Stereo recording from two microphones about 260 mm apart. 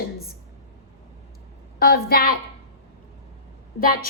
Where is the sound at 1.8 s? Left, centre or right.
Left.